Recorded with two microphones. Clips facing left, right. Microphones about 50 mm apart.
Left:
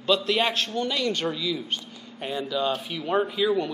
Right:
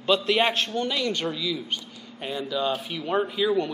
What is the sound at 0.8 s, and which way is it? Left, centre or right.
A man's voice, centre.